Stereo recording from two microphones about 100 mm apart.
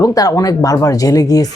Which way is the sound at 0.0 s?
35° left (ahead or behind).